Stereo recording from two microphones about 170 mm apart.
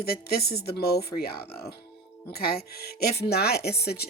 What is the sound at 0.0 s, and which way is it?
Speech, 65° left (ahead or behind).